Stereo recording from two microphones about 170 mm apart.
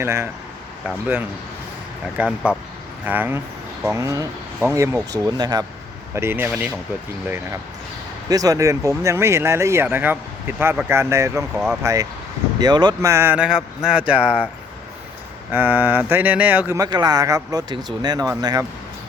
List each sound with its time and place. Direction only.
0.0 s speech: 15° right (ahead or behind)
8.3 s speech: 20° right (ahead or behind)
11.5 s speech: 5° right (ahead or behind)
11.8 s speech: 20° right (ahead or behind)
15.5 s speech: 10° right (ahead or behind)